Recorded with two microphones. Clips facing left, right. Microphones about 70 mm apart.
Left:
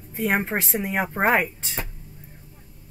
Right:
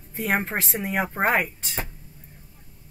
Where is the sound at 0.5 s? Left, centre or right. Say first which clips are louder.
Left 1 dB; centre.